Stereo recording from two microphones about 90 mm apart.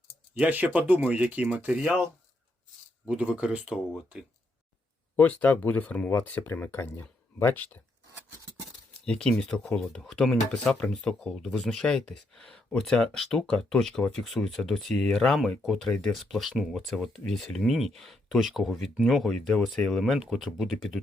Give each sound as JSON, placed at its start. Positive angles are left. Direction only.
{"t": 0.3, "sound": "speech", "side_deg": -20}
{"t": 3.1, "sound": "speech", "side_deg": -15}
{"t": 5.1, "sound": "speech", "side_deg": 15}
{"t": 9.0, "sound": "speech", "side_deg": 5}